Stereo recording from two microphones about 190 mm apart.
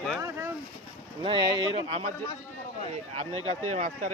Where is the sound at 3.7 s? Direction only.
45° right (ahead or behind).